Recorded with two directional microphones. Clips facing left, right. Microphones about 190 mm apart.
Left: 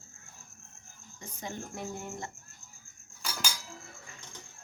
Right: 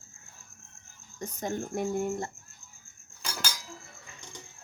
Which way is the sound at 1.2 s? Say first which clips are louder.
Right 7 dB; 45° right (ahead or behind).